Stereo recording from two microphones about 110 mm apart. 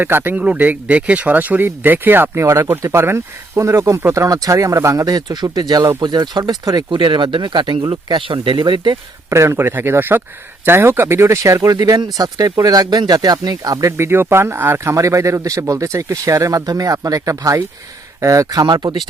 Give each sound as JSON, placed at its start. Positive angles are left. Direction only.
{"t": 0.0, "sound": "speech", "side_deg": -20}
{"t": 6.9, "sound": "speech", "side_deg": -45}
{"t": 9.3, "sound": "speech", "side_deg": -25}
{"t": 13.9, "sound": "speech", "side_deg": -20}
{"t": 18.6, "sound": "speech", "side_deg": -40}